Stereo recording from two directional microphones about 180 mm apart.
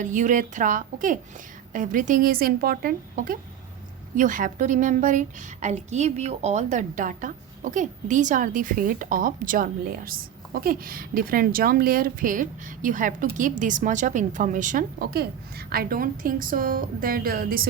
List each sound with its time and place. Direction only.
0.0 s a woman's voice: 45° right (ahead or behind)